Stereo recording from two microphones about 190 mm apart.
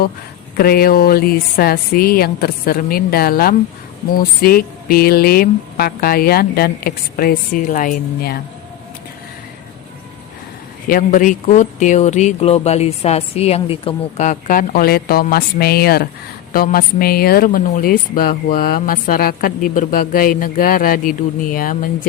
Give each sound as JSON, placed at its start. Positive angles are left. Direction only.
{"t": 0.5, "sound": "speech", "side_deg": 55}
{"t": 10.8, "sound": "speech", "side_deg": 45}